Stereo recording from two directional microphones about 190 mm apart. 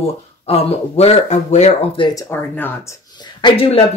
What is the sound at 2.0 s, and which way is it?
Speech, 15° left (ahead or behind).